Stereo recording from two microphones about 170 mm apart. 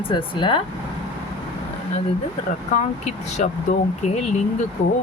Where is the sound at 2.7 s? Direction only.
45° left (ahead or behind).